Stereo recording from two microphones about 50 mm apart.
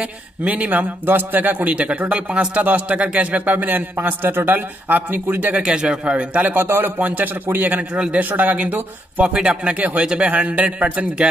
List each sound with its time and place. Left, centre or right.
0.4 s a man's voice: right
5.6 s speech: centre
6.5 s a man's voice: right
7.0 s a man's voice: right
9.8 s a man's voice: right